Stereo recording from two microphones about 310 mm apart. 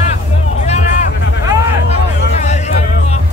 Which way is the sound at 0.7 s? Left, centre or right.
Left.